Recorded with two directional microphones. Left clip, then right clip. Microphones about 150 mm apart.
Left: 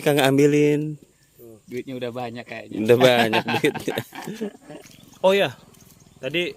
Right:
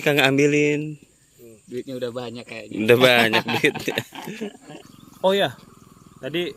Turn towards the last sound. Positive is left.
turn(degrees=0)  # may be behind; listen again after turning